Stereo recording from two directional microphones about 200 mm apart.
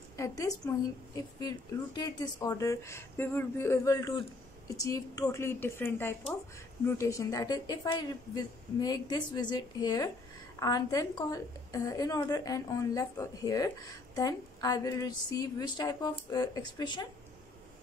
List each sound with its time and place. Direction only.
0.2 s a woman's voice: 15° left (ahead or behind)